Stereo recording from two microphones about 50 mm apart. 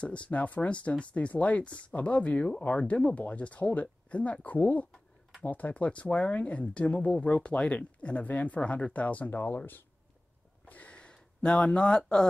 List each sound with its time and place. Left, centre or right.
0.0 s speech: left
10.6 s a sound: left
11.0 s speech: centre